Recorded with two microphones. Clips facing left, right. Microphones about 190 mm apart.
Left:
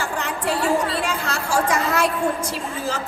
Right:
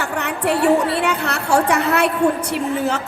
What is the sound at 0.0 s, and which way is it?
A woman's voice, 65° right (ahead or behind).